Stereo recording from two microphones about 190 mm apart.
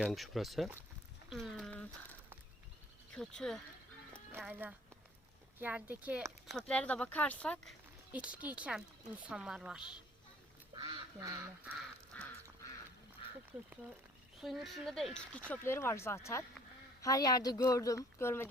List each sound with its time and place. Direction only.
0.0 s speech: centre (ahead or behind)
3.2 s speech: 5° left (ahead or behind)
4.3 s speech: 10° right (ahead or behind)
10.8 s duck: 20° right (ahead or behind)
12.1 s duck: 5° left (ahead or behind)
13.5 s speech: 5° right (ahead or behind); by 18.4 s 15° left (ahead or behind)